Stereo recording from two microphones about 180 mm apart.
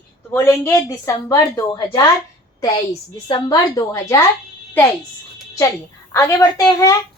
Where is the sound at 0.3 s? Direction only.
15° left (ahead or behind).